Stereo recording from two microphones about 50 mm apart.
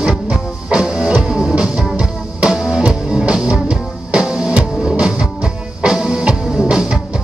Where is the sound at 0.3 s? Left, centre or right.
Centre.